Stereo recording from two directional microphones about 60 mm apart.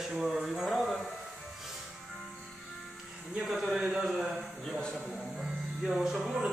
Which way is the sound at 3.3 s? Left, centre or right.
Centre.